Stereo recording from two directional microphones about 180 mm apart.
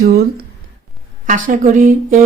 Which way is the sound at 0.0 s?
60° right (ahead or behind).